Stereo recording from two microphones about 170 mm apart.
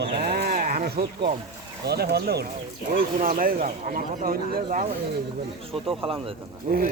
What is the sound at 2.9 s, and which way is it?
Speech, 55° right (ahead or behind).